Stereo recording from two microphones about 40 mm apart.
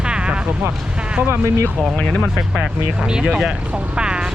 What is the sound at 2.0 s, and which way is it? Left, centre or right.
Speech, left.